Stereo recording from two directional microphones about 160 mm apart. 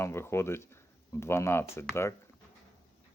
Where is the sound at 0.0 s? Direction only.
15° left (ahead or behind).